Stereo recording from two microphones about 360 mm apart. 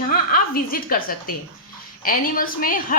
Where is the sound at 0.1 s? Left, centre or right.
Left.